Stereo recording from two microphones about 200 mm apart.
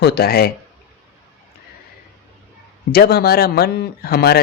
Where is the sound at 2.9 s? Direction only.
50° left (ahead or behind).